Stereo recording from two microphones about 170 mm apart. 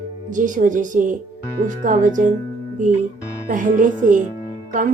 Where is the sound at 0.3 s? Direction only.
50° right (ahead or behind).